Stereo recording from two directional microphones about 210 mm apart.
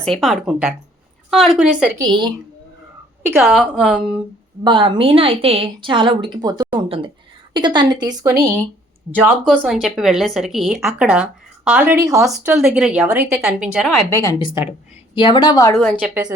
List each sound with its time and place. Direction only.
0.0 s speech: centre (ahead or behind)
2.0 s a woman's voice: 20° right (ahead or behind)
3.4 s speech: centre (ahead or behind)
4.6 s a woman's voice: 25° right (ahead or behind)
9.5 s speech: centre (ahead or behind); by 12.2 s 15° right (ahead or behind)
12.2 s speech: centre (ahead or behind)
14.1 s a woman's voice: 15° left (ahead or behind)
16.0 s a woman's voice: 5° right (ahead or behind)